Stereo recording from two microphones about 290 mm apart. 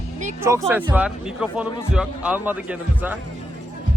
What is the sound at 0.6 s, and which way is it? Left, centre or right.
Speech, centre.